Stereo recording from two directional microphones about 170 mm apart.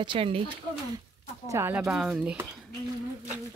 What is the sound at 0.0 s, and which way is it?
Speech, 30° right (ahead or behind).